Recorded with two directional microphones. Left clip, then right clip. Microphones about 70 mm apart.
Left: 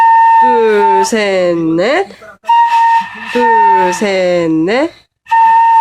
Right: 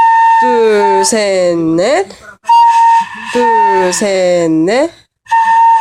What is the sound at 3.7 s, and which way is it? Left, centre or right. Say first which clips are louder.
Speech: left 1 dB; right.